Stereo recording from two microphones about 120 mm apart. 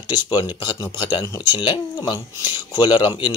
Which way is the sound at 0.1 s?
35° left (ahead or behind).